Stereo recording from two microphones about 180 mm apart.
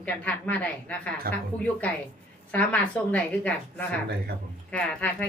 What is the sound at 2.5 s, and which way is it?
A woman's voice, 10° left (ahead or behind).